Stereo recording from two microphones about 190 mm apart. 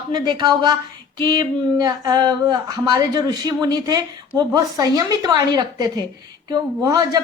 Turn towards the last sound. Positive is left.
turn(degrees=-20)  # may be behind; listen again after turning